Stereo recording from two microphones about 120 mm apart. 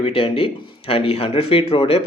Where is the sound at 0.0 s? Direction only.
50° left (ahead or behind).